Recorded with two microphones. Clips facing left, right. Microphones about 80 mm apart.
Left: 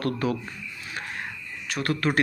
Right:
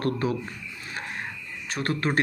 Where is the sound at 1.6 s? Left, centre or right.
Right.